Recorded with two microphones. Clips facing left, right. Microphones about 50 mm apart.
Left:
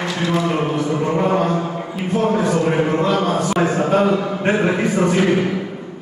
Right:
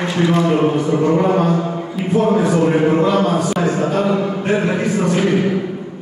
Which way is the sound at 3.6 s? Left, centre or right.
Left.